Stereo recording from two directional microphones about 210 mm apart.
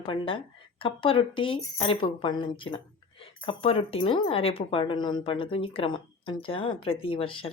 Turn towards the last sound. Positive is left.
turn(degrees=25)  # may be behind; listen again after turning